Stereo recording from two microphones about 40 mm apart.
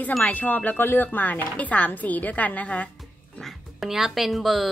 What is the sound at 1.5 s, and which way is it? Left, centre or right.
Speech, left.